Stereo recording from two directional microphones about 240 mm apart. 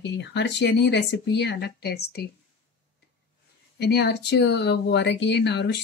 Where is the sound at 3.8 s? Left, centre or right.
Left.